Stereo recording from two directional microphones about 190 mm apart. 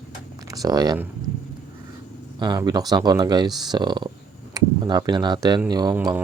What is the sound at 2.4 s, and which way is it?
Speech, 20° right (ahead or behind).